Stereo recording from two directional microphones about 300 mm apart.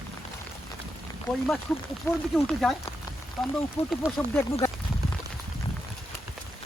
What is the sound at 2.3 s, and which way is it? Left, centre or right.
Speech, centre.